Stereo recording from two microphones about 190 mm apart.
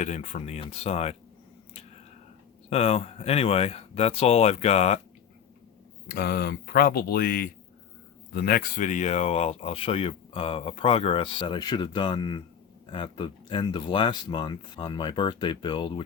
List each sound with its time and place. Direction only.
0.0 s speech: 40° left (ahead or behind)
2.6 s speech: 30° left (ahead or behind)
6.1 s speech: 55° left (ahead or behind); by 16.0 s 25° left (ahead or behind)